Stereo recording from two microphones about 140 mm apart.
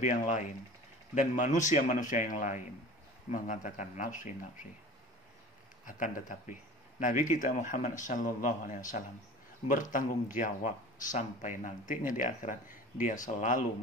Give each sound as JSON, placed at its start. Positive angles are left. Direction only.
{"t": 0.0, "sound": "speech", "side_deg": 60}
{"t": 5.9, "sound": "speech", "side_deg": 65}